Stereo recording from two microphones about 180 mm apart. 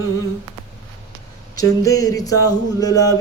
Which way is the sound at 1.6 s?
20° left (ahead or behind).